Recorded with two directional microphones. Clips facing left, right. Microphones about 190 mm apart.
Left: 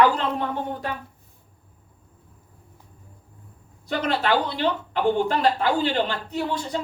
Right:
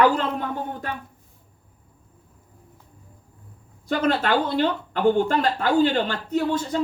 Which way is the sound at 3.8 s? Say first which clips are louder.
Right 2 dB; 45° right (ahead or behind).